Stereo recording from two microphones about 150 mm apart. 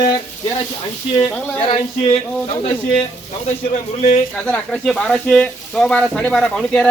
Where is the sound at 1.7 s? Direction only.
35° left (ahead or behind).